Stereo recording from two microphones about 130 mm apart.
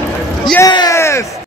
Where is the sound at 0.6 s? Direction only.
30° left (ahead or behind).